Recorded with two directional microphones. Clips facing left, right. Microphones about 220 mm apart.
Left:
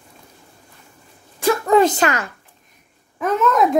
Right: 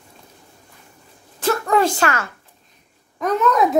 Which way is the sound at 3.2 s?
Centre (ahead or behind).